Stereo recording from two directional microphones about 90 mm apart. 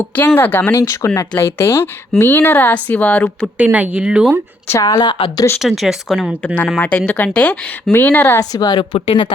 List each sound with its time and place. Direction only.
0.3 s speech: 25° left (ahead or behind)
0.8 s speech: 35° left (ahead or behind); by 3.2 s 15° left (ahead or behind)
3.6 s speech: 15° right (ahead or behind)
4.7 s a woman's voice: 35° left (ahead or behind)
5.5 s speech: centre (ahead or behind); by 8.4 s 20° left (ahead or behind)
8.4 s a woman's voice: 45° left (ahead or behind); by 9.3 s 65° left (ahead or behind)